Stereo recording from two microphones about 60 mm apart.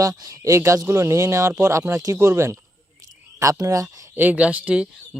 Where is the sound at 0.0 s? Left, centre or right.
Right.